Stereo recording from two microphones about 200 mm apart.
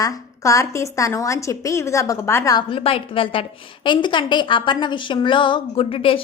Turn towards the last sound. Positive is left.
turn(degrees=25)  # may be behind; listen again after turning